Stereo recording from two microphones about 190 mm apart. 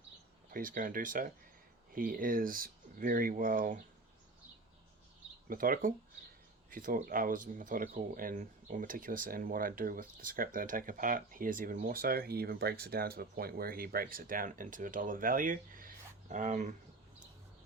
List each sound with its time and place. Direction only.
0.5 s speech: 45° right (ahead or behind)
5.5 s speech: 50° right (ahead or behind)